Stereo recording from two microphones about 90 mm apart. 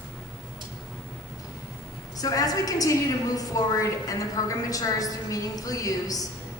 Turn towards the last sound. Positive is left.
turn(degrees=40)  # may be behind; listen again after turning